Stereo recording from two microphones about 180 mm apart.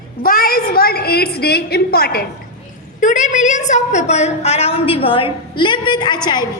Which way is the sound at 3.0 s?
45° left (ahead or behind).